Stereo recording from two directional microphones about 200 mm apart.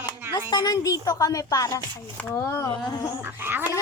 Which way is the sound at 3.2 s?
10° right (ahead or behind).